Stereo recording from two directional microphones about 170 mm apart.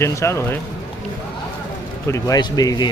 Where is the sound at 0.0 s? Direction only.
15° left (ahead or behind).